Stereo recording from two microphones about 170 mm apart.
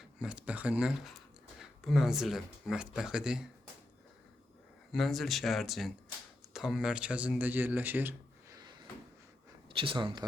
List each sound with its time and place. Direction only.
0.0 s speech: 5° right (ahead or behind)
4.9 s speech: centre (ahead or behind)
8.5 s cupboard open or close: 25° right (ahead or behind)
9.6 s speech: 30° right (ahead or behind)